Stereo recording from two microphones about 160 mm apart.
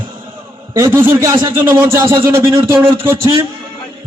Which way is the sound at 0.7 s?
20° right (ahead or behind).